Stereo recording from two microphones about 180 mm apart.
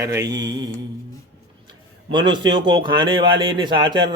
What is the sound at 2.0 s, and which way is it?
Speech, 25° right (ahead or behind).